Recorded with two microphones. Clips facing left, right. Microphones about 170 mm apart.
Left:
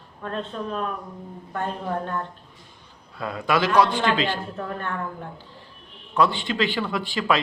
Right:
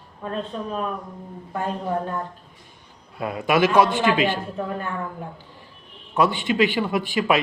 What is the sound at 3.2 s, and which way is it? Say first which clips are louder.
Speech: right 3 dB; 15° right (ahead or behind).